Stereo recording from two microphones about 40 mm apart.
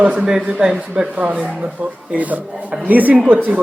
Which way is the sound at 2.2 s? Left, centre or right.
Right.